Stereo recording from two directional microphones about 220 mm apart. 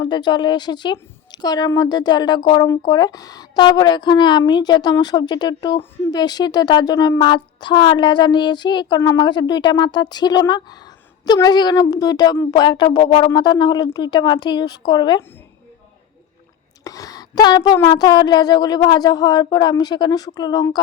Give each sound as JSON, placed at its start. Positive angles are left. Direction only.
{"t": 0.0, "sound": "a woman's voice", "side_deg": 20}
{"t": 16.8, "sound": "a woman's voice", "side_deg": 15}